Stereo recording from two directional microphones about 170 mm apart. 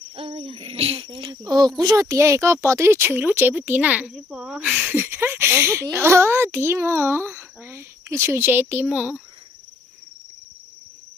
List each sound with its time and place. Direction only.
0.2 s speech: 35° right (ahead or behind); by 9.2 s 5° right (ahead or behind)